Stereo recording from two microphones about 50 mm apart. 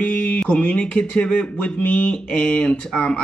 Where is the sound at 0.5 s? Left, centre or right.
Left.